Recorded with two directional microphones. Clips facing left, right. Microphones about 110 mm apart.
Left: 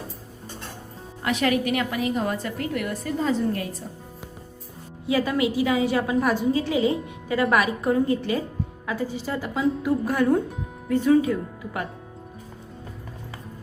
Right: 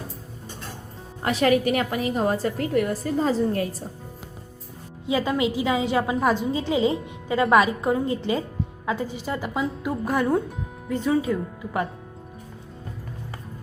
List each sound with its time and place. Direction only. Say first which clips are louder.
1.2 s a woman's voice: right 3 dB; 35° right (ahead or behind)
5.0 s a woman's voice: even; 25° right (ahead or behind)